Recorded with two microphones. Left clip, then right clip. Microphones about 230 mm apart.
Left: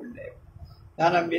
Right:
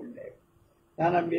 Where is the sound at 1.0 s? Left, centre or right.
Left.